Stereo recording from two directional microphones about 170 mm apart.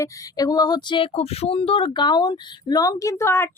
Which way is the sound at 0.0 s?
20° left (ahead or behind).